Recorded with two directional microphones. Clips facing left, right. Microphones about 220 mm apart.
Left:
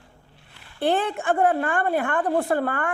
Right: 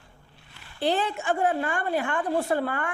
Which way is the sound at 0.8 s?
55° left (ahead or behind).